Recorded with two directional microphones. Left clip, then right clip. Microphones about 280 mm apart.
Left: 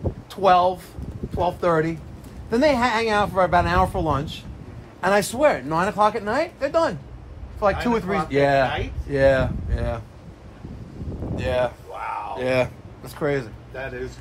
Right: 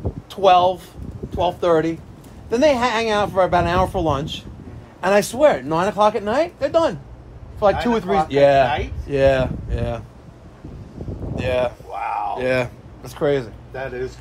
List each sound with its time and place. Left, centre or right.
0.3 s speech: centre
11.3 s speech: centre
13.7 s a man's voice: right